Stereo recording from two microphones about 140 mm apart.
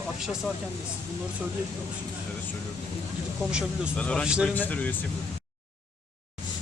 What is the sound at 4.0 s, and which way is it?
Speech, 5° left (ahead or behind).